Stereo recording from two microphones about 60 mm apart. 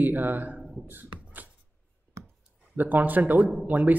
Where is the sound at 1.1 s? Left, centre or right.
Right.